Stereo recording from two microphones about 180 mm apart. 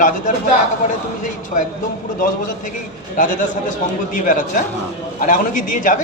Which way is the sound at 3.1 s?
45° left (ahead or behind).